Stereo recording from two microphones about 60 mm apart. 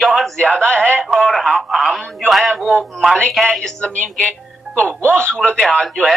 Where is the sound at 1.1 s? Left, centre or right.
Centre.